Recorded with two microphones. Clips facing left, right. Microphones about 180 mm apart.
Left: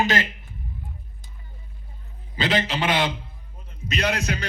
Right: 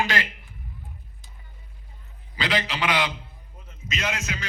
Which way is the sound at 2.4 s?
25° left (ahead or behind).